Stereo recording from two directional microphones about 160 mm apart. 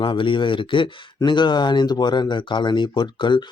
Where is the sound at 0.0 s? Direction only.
30° left (ahead or behind).